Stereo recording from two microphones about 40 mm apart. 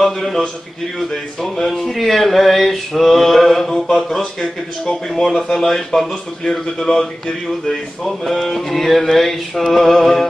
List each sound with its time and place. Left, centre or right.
0.0 s speech: centre
7.6 s speech: centre